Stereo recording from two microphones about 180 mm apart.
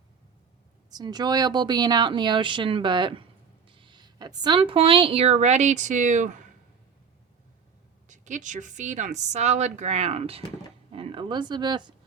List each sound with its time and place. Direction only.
0.9 s a woman's voice: 20° right (ahead or behind); by 6.4 s 45° right (ahead or behind)
8.0 s a woman's voice: 45° right (ahead or behind); by 11.9 s 25° right (ahead or behind)